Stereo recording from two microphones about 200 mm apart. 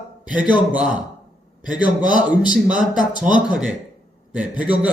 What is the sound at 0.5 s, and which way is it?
A man's voice, 5° right (ahead or behind).